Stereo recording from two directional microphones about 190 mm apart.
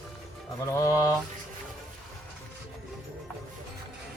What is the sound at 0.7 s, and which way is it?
Mantra, 15° left (ahead or behind).